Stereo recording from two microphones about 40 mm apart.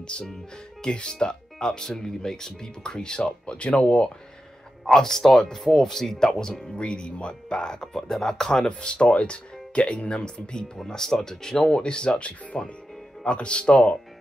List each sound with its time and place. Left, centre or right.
0.1 s speech: left
4.8 s speech: centre
6.8 s speech: left